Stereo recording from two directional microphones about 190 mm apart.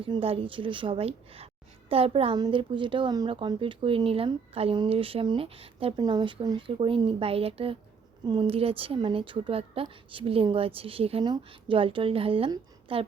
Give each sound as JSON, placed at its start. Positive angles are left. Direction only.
{"t": 0.0, "sound": "a woman's voice", "side_deg": -30}